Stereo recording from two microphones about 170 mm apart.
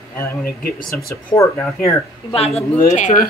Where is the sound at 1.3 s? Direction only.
15° left (ahead or behind).